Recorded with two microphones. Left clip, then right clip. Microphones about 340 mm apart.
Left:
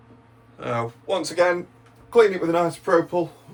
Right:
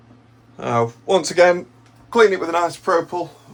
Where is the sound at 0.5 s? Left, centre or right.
Centre.